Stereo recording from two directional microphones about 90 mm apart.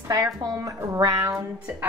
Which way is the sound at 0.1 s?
40° right (ahead or behind).